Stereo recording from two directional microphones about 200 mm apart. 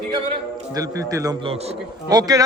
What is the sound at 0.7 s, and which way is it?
A man's voice, 15° right (ahead or behind).